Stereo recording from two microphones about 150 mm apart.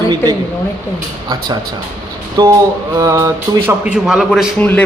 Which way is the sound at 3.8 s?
5° right (ahead or behind).